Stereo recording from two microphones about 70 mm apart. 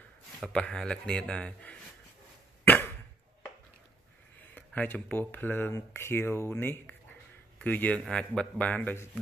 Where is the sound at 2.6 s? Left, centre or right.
Left.